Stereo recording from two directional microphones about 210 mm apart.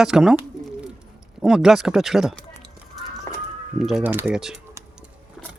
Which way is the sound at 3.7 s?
Centre (ahead or behind).